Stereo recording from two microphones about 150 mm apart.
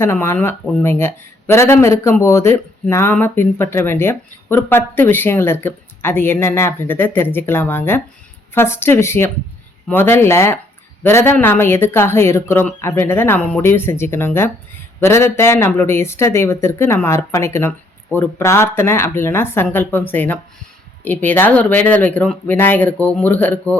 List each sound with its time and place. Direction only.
0.0 s speech: 15° left (ahead or behind)